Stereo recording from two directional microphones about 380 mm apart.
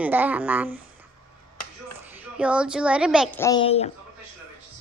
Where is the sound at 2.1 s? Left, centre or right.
Centre.